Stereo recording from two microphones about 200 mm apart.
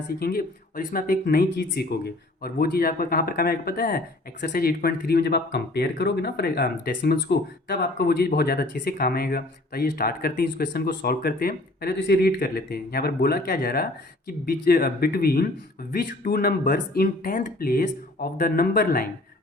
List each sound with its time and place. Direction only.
0.2 s speech: 50° left (ahead or behind)